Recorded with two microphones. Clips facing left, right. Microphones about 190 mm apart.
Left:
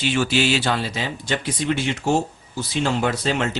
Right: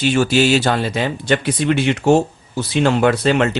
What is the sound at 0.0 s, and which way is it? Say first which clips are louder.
Speech: right 6 dB; 45° right (ahead or behind).